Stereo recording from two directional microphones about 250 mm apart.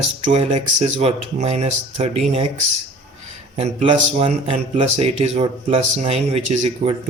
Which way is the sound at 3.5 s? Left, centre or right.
Right.